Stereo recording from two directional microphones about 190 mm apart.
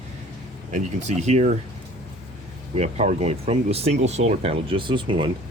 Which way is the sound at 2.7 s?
35° right (ahead or behind).